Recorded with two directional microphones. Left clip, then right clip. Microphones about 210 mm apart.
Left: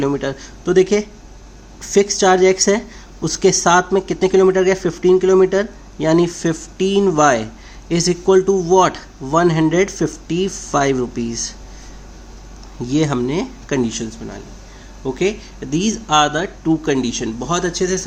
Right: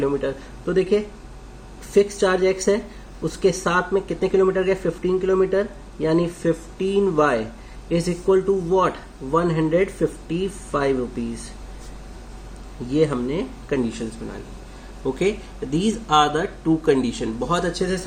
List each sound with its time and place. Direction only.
0.0 s speech: 50° left (ahead or behind)
8.4 s speech: 60° left (ahead or behind)
12.9 s speech: 55° left (ahead or behind)
15.0 s speech: 30° left (ahead or behind)